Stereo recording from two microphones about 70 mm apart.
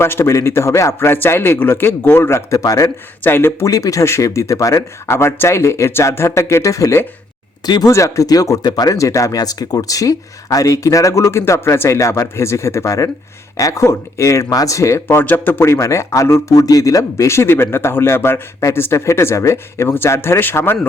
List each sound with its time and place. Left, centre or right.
0.0 s speech: left
2.5 s speech: left
3.2 s speech: left
3.7 s speech: left
7.6 s speech: left
7.9 s speech: left
8.9 s speech: left
14.5 s speech: left
15.0 s speech: left
15.6 s speech: left
16.6 s speech: left